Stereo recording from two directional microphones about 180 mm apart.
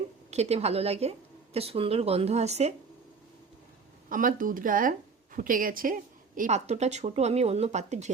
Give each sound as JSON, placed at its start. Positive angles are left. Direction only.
{"t": 0.3, "sound": "speech", "side_deg": -35}
{"t": 4.1, "sound": "speech", "side_deg": -50}